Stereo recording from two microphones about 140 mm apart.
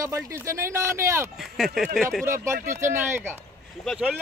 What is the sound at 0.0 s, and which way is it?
Speech, 20° right (ahead or behind).